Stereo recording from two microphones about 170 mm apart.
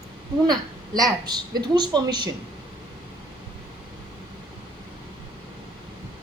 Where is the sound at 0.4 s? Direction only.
20° right (ahead or behind).